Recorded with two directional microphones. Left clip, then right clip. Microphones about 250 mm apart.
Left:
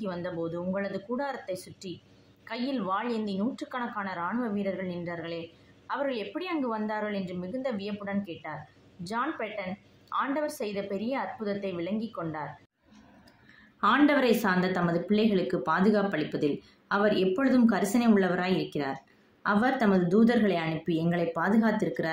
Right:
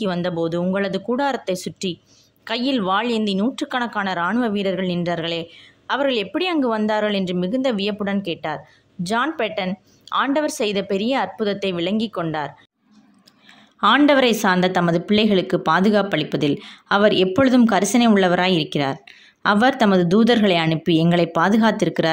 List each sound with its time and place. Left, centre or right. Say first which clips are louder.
0.0 s a woman's voice: right 11 dB; right
13.7 s a woman's voice: right 9 dB; right